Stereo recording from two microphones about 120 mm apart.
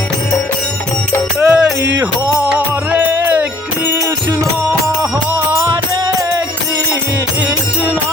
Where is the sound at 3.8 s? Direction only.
30° right (ahead or behind).